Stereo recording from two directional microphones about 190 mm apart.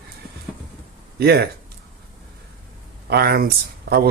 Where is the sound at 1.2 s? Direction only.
60° right (ahead or behind).